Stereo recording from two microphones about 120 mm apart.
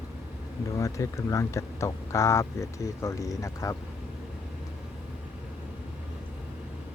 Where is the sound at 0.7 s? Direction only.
25° left (ahead or behind).